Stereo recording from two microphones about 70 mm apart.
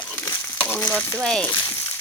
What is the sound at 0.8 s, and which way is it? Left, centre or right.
Speech, centre.